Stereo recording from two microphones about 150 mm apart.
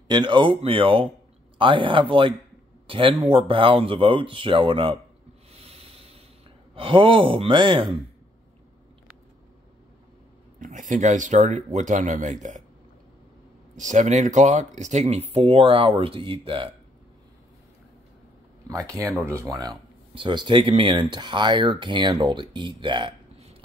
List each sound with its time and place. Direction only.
0.1 s speech: 30° right (ahead or behind)
5.5 s a sound: 40° right (ahead or behind)
6.7 s speech: 35° right (ahead or behind)
10.6 s speech: 60° right (ahead or behind)
13.7 s speech: 55° right (ahead or behind); by 16.7 s 35° right (ahead or behind)
18.7 s speech: 20° right (ahead or behind)